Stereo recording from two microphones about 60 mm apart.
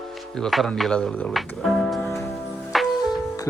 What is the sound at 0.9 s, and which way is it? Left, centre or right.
Speech, centre.